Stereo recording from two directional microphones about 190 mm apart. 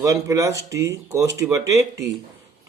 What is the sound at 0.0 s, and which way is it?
A man's voice, 15° right (ahead or behind).